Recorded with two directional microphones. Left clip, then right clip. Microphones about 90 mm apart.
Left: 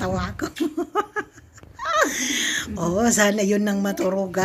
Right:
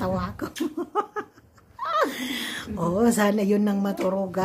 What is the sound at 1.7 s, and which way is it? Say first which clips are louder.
Speech: left 3 dB; 35° right (ahead or behind).